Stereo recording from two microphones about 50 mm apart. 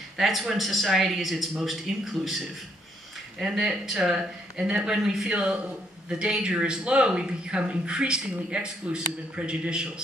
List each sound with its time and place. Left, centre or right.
0.2 s a man's voice: centre
3.3 s speech: centre
5.3 s a man's voice: right